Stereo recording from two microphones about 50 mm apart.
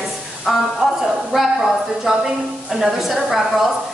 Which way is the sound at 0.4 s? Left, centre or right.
Centre.